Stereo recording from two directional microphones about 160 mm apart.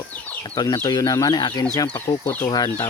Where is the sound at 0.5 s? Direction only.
25° left (ahead or behind).